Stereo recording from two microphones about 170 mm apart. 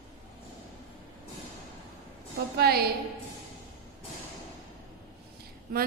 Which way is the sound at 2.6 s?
65° right (ahead or behind).